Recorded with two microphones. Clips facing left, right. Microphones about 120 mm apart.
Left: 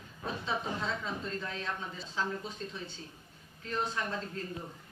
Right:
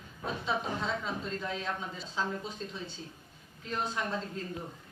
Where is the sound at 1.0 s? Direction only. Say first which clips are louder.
Right 2 dB; 20° right (ahead or behind).